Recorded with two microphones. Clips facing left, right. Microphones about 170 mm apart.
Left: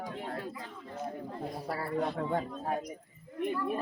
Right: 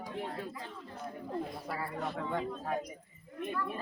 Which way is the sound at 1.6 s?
35° left (ahead or behind).